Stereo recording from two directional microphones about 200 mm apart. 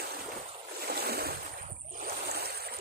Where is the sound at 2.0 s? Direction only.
50° right (ahead or behind).